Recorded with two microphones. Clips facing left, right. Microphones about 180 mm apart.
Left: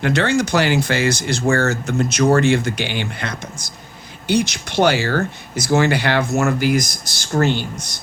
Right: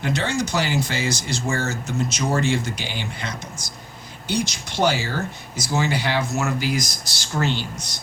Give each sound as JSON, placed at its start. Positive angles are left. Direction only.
{"t": 0.0, "sound": "speech", "side_deg": 70}